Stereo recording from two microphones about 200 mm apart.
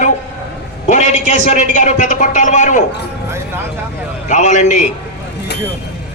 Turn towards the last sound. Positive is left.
turn(degrees=35)  # may be behind; listen again after turning